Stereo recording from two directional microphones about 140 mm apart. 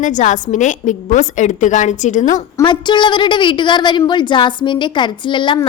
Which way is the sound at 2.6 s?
35° left (ahead or behind).